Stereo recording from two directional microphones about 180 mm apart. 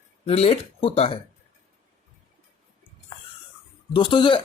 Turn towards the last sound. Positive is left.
turn(degrees=25)  # may be behind; listen again after turning